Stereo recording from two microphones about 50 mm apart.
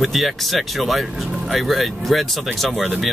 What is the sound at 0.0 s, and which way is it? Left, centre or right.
Speech, centre.